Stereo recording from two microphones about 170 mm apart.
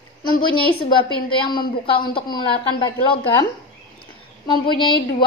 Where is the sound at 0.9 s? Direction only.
30° left (ahead or behind).